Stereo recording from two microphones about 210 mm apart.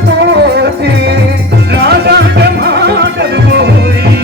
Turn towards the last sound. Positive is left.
turn(degrees=-50)  # may be behind; listen again after turning